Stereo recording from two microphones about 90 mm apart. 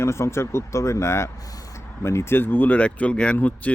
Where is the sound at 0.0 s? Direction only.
30° left (ahead or behind).